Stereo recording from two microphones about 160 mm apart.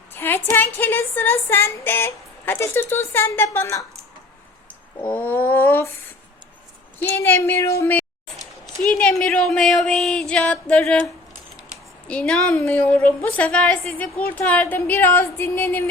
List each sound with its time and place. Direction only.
0.1 s a woman's voice: 15° left (ahead or behind)
4.9 s a woman's voice: 15° left (ahead or behind)
7.2 s a woman's voice: 15° left (ahead or behind)
12.0 s a woman's voice: 5° left (ahead or behind)